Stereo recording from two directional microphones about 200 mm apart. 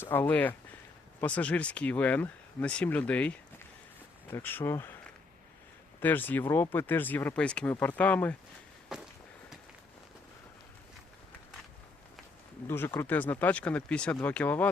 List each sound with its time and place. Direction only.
0.0 s speech: 10° left (ahead or behind)
6.0 s speech: 10° left (ahead or behind)
8.9 s walk: 5° right (ahead or behind)
12.6 s speech: 10° left (ahead or behind)